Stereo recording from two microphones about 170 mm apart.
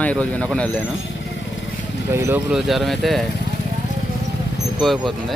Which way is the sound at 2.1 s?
15° right (ahead or behind).